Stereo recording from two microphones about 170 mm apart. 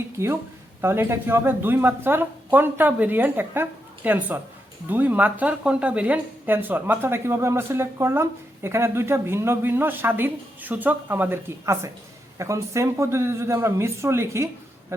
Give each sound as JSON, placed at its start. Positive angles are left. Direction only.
{"t": 0.8, "sound": "speech", "side_deg": -15}